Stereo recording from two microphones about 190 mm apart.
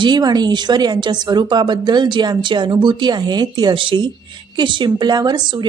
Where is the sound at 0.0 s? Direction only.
20° right (ahead or behind).